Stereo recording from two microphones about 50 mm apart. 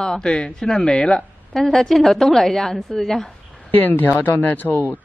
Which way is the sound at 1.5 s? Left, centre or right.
Centre.